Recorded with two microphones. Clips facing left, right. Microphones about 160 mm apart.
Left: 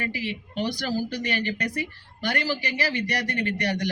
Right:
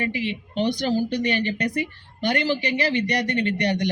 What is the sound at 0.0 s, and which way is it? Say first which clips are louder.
Speech: right 4 dB; 20° right (ahead or behind).